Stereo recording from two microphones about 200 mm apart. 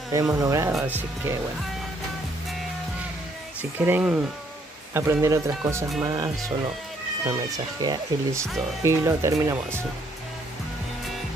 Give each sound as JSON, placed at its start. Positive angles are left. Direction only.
{"t": 0.1, "sound": "speech", "side_deg": -15}
{"t": 3.8, "sound": "speech", "side_deg": -10}